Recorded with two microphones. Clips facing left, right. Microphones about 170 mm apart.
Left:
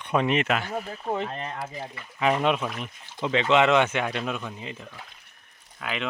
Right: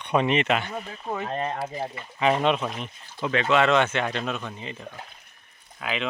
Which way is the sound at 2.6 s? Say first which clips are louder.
Right 1 dB; 25° right (ahead or behind).